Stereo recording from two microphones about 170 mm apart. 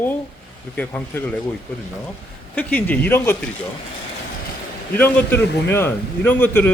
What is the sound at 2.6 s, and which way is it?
Speech, 10° left (ahead or behind).